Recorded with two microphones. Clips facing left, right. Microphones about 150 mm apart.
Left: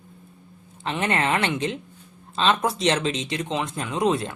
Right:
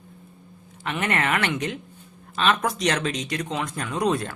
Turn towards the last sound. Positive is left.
turn(degrees=20)  # may be behind; listen again after turning